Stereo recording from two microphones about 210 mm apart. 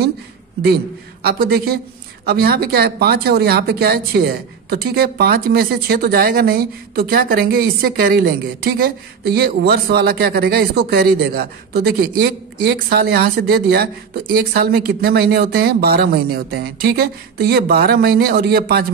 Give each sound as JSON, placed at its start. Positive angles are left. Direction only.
{"t": 1.2, "sound": "speech", "side_deg": -45}